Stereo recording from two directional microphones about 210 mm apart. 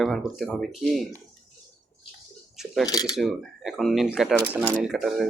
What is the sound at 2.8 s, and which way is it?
Speech, 20° left (ahead or behind).